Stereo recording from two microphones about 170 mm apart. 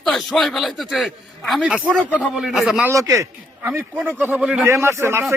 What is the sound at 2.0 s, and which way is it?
Speech, 5° left (ahead or behind).